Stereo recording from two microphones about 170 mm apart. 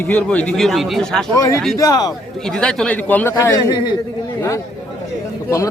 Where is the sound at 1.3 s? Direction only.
20° left (ahead or behind).